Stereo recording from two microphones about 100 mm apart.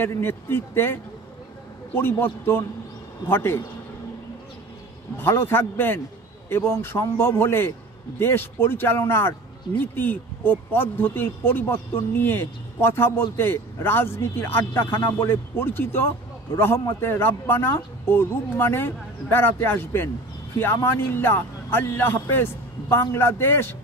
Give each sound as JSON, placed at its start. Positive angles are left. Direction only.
{"t": 0.0, "sound": "speech", "side_deg": 20}
{"t": 2.0, "sound": "speech", "side_deg": 20}
{"t": 5.1, "sound": "speech", "side_deg": 25}